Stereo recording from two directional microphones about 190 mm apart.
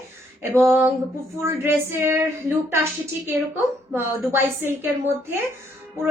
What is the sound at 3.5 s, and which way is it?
A woman's voice, 10° right (ahead or behind).